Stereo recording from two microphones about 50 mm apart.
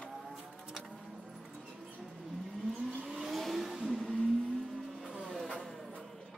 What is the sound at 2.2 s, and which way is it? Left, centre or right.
Vehicle, centre.